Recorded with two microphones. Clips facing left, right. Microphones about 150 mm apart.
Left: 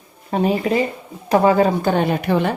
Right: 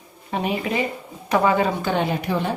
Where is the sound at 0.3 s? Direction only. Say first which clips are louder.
Left 6 dB; 40° left (ahead or behind); by 2.5 s 60° left (ahead or behind).